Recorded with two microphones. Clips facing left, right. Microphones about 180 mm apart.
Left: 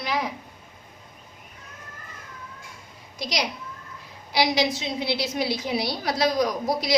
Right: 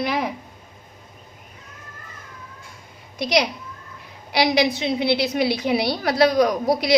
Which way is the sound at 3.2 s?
60° right (ahead or behind).